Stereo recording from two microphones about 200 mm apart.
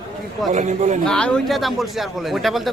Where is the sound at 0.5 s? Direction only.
35° right (ahead or behind).